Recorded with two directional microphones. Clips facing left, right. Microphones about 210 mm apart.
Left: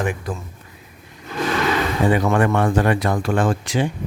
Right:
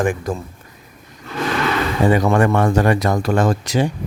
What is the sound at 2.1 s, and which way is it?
Speech, 40° right (ahead or behind).